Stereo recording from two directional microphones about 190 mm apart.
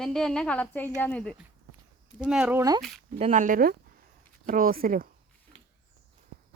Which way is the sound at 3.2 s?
40° right (ahead or behind).